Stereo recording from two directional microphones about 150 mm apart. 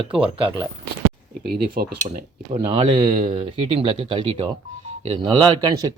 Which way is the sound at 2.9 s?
30° right (ahead or behind).